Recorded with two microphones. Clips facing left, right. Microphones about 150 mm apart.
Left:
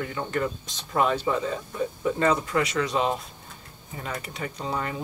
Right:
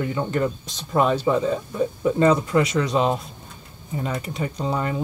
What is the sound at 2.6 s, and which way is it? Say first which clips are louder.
Speech: right 4 dB; 35° right (ahead or behind).